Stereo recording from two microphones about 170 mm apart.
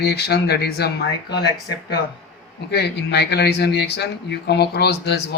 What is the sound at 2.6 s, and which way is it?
Speech, 75° left (ahead or behind).